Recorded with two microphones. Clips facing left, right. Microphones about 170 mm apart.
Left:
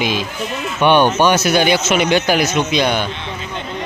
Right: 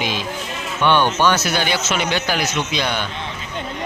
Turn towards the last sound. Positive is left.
turn(degrees=15)  # may be behind; listen again after turning